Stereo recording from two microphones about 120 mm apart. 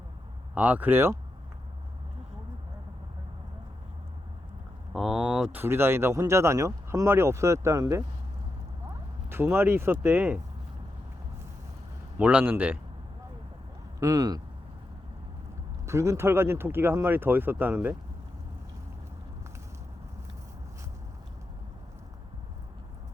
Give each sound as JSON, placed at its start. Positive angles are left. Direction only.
{"t": 0.5, "sound": "speech", "side_deg": -10}
{"t": 4.9, "sound": "a sound", "side_deg": -5}
{"t": 5.5, "sound": "speech", "side_deg": -20}
{"t": 9.3, "sound": "speech", "side_deg": -20}
{"t": 12.2, "sound": "speech", "side_deg": -10}
{"t": 14.0, "sound": "speech", "side_deg": -30}
{"t": 15.9, "sound": "speech", "side_deg": -25}